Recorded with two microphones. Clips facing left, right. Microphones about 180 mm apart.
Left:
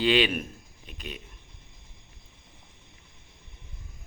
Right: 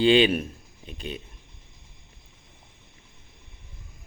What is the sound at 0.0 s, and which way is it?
A man's voice, 30° right (ahead or behind).